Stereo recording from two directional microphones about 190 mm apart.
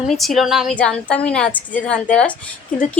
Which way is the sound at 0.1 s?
Centre (ahead or behind).